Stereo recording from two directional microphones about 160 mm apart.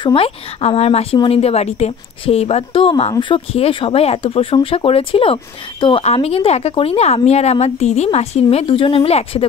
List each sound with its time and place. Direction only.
0.0 s a woman's voice: 35° left (ahead or behind)